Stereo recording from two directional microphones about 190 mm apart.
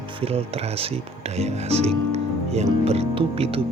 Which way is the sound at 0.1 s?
30° right (ahead or behind).